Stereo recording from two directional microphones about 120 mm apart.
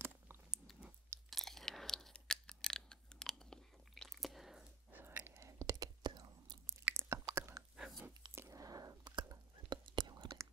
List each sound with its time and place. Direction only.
0.5 s chewing: 5° right (ahead or behind)
4.9 s whispering: 15° right (ahead or behind); by 6.6 s 35° right (ahead or behind)
6.6 s chewing: 20° right (ahead or behind)
7.7 s biting: 5° right (ahead or behind)
8.4 s whispering: 25° right (ahead or behind)